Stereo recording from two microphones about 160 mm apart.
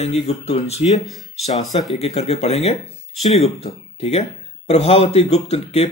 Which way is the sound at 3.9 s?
40° left (ahead or behind).